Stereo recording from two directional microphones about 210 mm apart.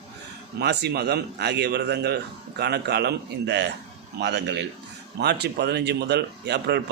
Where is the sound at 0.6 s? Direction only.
50° right (ahead or behind).